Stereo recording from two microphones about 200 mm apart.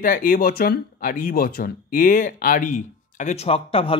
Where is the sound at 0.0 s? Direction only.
45° left (ahead or behind).